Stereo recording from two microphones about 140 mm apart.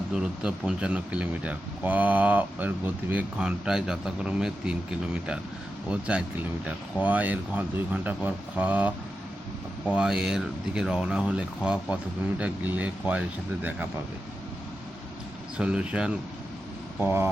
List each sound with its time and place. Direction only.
0.4 s speech: 5° right (ahead or behind)
5.9 s speech: 10° right (ahead or behind)
9.9 s speech: 5° right (ahead or behind)
15.5 s speech: 5° right (ahead or behind)